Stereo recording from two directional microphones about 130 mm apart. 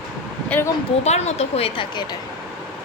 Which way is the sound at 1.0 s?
55° left (ahead or behind).